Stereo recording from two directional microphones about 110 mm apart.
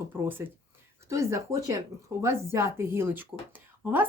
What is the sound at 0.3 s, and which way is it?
A woman's voice, 20° right (ahead or behind).